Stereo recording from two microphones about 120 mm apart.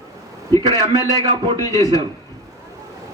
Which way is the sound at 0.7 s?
35° right (ahead or behind).